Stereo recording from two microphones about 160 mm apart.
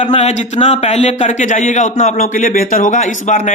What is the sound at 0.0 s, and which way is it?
Speech, 45° left (ahead or behind).